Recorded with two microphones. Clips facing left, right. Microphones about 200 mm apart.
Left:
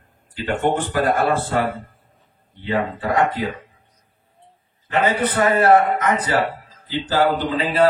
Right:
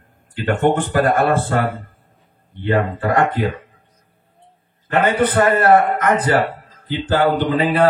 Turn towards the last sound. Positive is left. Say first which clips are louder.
# right 3 dB
turn(degrees=-55)  # may be behind; listen again after turning